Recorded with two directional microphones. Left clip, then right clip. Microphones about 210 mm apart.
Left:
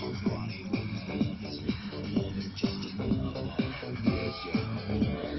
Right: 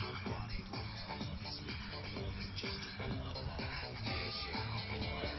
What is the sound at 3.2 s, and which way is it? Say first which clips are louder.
Music: left 9 dB; 50° left (ahead or behind).